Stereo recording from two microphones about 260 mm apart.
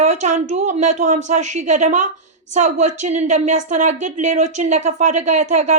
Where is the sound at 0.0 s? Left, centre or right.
Right.